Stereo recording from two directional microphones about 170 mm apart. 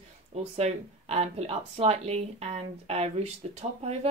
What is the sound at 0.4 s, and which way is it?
A woman's voice, 35° right (ahead or behind).